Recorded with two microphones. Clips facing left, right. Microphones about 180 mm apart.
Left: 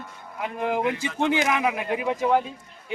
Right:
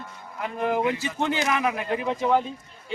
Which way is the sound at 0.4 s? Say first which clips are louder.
Right 1 dB; 15° left (ahead or behind).